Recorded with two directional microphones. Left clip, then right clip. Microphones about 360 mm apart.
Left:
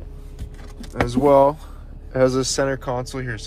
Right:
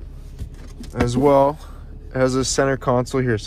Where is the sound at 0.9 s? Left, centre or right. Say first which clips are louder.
Even; right.